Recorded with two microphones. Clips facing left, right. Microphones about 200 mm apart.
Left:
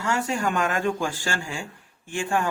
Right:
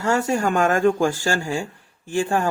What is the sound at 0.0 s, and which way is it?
Speech, 40° right (ahead or behind).